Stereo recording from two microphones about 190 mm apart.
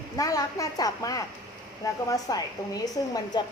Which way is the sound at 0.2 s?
20° left (ahead or behind).